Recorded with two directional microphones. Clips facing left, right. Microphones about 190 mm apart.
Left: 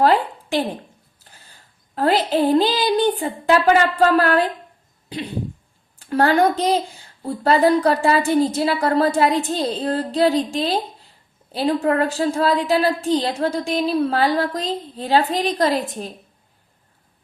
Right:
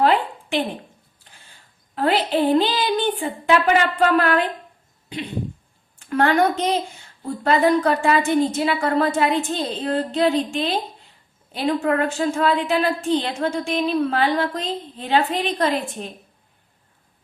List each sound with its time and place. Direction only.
0.0 s a woman's voice: 40° left (ahead or behind)
2.0 s a woman's voice: 40° left (ahead or behind)
6.0 s a woman's voice: 35° left (ahead or behind)